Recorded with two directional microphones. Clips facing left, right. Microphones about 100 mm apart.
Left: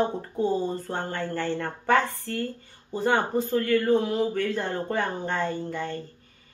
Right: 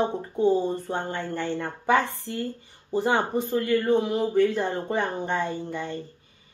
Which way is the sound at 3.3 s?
5° right (ahead or behind).